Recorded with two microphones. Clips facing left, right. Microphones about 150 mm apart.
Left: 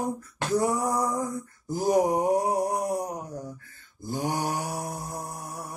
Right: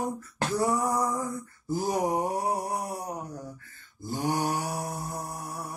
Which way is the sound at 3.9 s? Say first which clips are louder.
Even; 15° left (ahead or behind).